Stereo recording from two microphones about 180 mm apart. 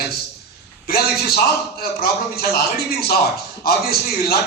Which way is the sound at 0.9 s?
60° left (ahead or behind).